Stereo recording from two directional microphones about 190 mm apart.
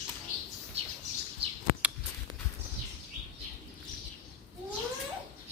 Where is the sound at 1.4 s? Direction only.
30° right (ahead or behind).